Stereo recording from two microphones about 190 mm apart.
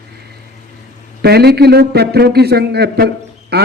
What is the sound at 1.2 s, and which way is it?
A man's voice, 55° right (ahead or behind).